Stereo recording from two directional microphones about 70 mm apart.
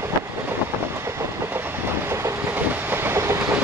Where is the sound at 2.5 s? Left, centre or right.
Right.